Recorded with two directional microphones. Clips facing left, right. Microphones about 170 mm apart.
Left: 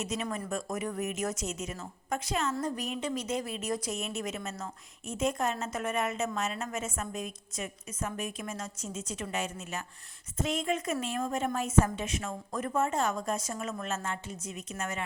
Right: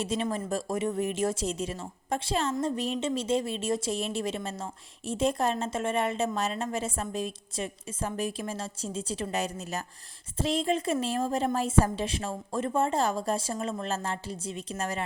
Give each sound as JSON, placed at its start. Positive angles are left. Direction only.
{"t": 0.0, "sound": "speech", "side_deg": -30}